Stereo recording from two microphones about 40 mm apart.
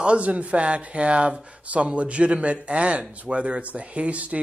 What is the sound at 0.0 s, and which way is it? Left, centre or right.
Speech, right.